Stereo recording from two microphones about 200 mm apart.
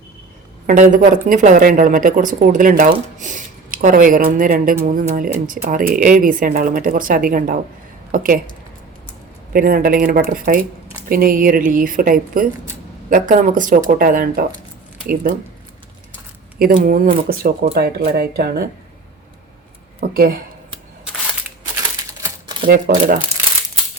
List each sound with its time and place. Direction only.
0.7 s speech: 40° right (ahead or behind)
9.5 s speech: 45° right (ahead or behind)
16.6 s speech: 45° right (ahead or behind)
20.0 s speech: 50° right (ahead or behind)
22.7 s speech: 45° right (ahead or behind)